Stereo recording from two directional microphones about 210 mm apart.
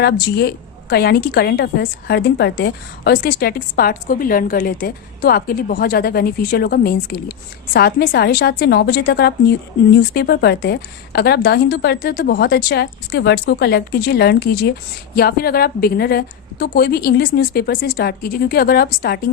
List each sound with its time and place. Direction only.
0.0 s a woman's voice: 50° left (ahead or behind)